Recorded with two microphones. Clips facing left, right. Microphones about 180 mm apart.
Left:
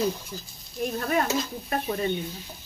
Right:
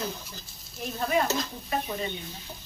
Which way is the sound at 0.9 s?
50° left (ahead or behind).